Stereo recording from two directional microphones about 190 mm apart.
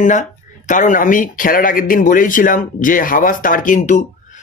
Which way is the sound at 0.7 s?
40° left (ahead or behind).